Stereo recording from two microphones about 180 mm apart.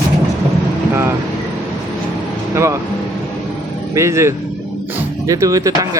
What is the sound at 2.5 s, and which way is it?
Speech, 15° right (ahead or behind).